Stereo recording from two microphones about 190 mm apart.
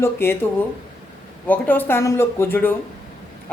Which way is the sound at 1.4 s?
10° left (ahead or behind).